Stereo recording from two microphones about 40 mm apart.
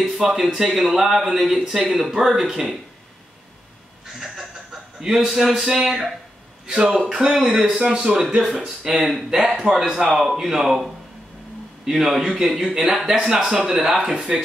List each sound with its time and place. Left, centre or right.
0.0 s a man's voice: centre
5.0 s speech: centre
6.7 s speech: centre